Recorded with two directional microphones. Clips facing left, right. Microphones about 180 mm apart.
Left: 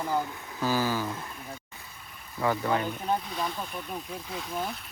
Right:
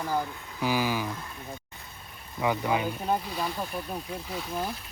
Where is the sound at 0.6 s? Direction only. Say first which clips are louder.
Even; 15° right (ahead or behind).